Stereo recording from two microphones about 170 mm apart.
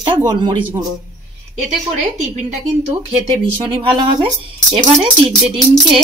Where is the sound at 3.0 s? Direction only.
35° right (ahead or behind).